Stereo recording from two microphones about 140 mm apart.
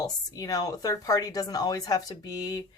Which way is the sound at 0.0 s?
25° left (ahead or behind).